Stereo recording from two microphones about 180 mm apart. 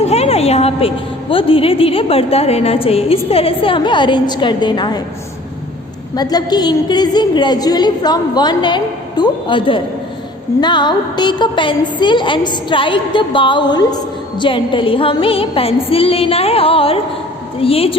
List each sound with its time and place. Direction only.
0.0 s a woman's voice: 35° left (ahead or behind)
6.1 s a woman's voice: 20° left (ahead or behind)